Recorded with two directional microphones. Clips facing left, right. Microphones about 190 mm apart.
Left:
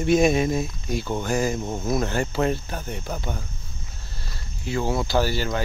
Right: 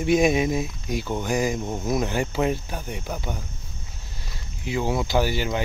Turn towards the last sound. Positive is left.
turn(degrees=-15)  # may be behind; listen again after turning